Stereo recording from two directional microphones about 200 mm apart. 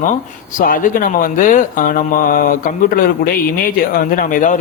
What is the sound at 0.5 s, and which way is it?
Speech, 45° left (ahead or behind).